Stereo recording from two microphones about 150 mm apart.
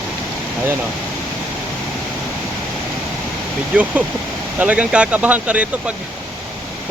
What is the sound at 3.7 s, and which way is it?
Speech, 10° right (ahead or behind).